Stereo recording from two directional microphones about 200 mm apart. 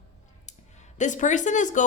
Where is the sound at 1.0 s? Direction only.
40° left (ahead or behind).